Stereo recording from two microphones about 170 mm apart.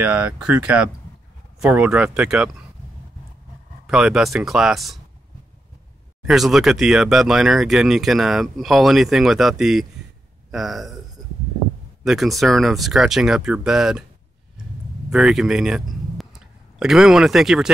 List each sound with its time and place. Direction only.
0.0 s speech: 10° right (ahead or behind)
3.8 s speech: 5° right (ahead or behind)
6.2 s speech: centre (ahead or behind)
12.0 s speech: centre (ahead or behind)
15.0 s a man's voice: 5° right (ahead or behind)